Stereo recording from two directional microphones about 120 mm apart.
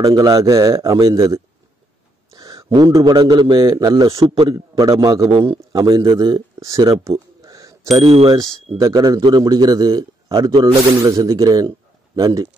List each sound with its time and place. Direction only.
0.0 s speech: 30° right (ahead or behind)
2.3 s a sound: 30° right (ahead or behind)
3.2 s a man's voice: 40° right (ahead or behind)
8.0 s speech: 55° right (ahead or behind)
8.3 s a man's voice: 30° right (ahead or behind)
10.5 s speech: 45° right (ahead or behind)
11.0 s speech: 30° right (ahead or behind)